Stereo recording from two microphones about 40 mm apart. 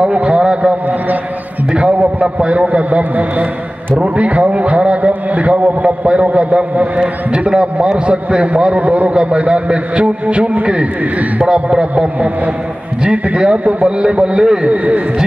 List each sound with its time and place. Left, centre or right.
0.0 s a man's voice: right
1.9 s a man's voice: right
8.7 s a man's voice: right
9.1 s a man's voice: right